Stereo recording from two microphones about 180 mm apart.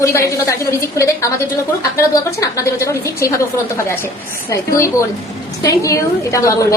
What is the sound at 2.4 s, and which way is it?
A woman's voice, 15° left (ahead or behind).